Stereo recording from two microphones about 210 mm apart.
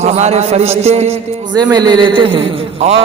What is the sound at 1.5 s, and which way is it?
Mantra, 20° right (ahead or behind).